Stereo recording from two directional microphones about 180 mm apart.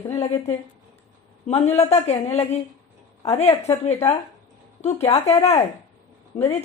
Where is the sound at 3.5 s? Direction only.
15° left (ahead or behind).